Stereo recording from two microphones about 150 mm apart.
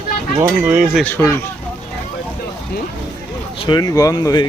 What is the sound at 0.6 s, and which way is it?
Speech, 10° right (ahead or behind).